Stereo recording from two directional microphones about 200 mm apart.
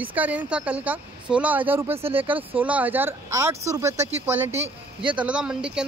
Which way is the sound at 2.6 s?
10° right (ahead or behind).